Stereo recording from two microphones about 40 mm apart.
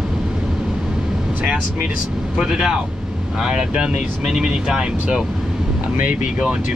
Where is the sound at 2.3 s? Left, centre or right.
Centre.